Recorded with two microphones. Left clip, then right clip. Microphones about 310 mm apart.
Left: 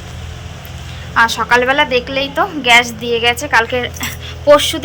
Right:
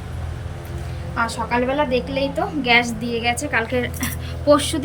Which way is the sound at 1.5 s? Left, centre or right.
Left.